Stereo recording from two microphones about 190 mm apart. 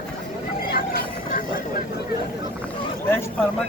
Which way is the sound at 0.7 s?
50° left (ahead or behind).